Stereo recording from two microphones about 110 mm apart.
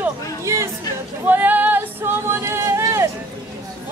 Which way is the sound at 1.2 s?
15° right (ahead or behind).